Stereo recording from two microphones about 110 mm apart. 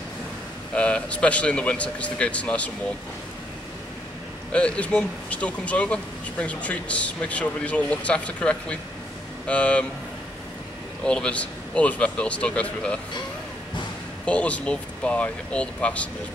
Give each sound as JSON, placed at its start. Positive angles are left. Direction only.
{"t": 0.7, "sound": "speech", "side_deg": 10}
{"t": 4.5, "sound": "speech", "side_deg": 10}
{"t": 11.1, "sound": "speech", "side_deg": 10}
{"t": 14.2, "sound": "speech", "side_deg": 10}